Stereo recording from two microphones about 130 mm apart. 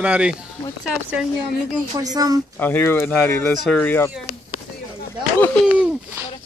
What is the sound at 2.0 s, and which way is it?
Speech, 30° right (ahead or behind).